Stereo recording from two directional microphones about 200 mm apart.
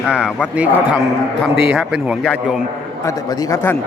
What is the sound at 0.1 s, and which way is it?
A man's voice, 5° right (ahead or behind).